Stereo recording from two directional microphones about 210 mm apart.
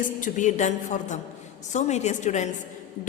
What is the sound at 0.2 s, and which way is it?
A woman's voice, 35° left (ahead or behind).